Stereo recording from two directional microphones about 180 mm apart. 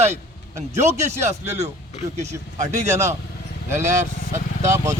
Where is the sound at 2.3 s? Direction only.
20° right (ahead or behind).